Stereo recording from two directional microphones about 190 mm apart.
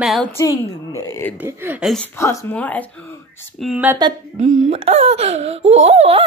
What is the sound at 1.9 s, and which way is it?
Speech, 10° left (ahead or behind).